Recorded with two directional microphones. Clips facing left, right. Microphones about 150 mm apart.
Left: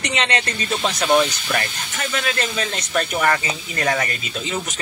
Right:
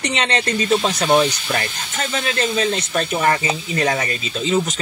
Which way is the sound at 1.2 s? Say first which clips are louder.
Right 2 dB; 25° right (ahead or behind).